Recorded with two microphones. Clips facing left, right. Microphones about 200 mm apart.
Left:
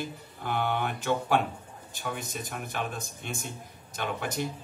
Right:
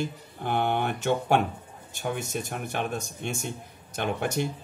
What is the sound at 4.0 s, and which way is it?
Speech, 50° right (ahead or behind).